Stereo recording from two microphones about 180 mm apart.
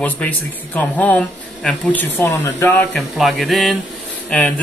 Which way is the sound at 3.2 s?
Centre (ahead or behind).